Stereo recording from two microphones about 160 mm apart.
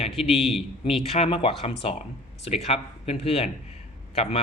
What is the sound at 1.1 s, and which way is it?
Speech, 35° left (ahead or behind).